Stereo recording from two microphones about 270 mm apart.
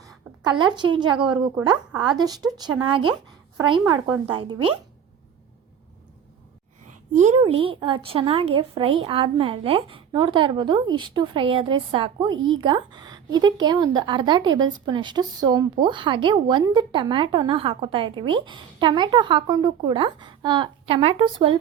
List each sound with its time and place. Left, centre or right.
0.4 s a woman's voice: centre
6.8 s a woman's voice: right